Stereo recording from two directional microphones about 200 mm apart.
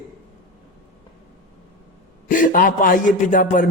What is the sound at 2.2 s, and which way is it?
A man's voice, 45° left (ahead or behind).